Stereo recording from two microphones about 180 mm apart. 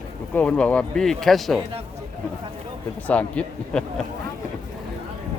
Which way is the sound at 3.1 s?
5° left (ahead or behind).